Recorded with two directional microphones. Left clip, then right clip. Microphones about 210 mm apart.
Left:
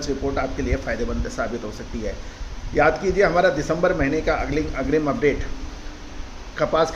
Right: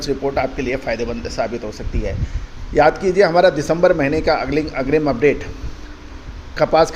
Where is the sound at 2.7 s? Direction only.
40° right (ahead or behind).